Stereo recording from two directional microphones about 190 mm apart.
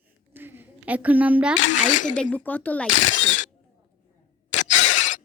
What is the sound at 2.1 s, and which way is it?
Speech, 5° left (ahead or behind).